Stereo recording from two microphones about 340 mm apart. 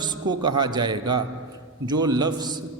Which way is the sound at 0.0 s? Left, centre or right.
Centre.